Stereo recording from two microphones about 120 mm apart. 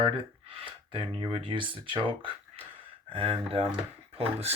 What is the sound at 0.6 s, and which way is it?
Speech, 45° right (ahead or behind).